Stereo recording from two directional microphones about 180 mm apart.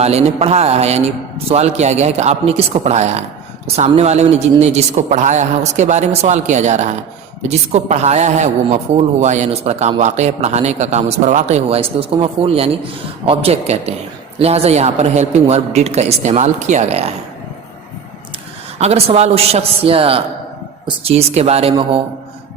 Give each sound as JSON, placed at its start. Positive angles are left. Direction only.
{"t": 0.0, "sound": "a man's voice", "side_deg": -35}
{"t": 18.8, "sound": "a man's voice", "side_deg": -35}